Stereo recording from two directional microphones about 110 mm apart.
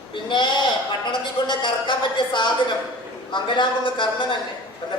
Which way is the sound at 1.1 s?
45° left (ahead or behind).